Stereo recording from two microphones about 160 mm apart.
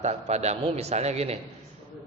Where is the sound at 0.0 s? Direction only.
45° right (ahead or behind).